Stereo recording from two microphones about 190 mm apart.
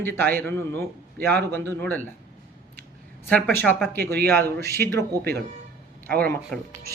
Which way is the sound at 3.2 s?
5° left (ahead or behind).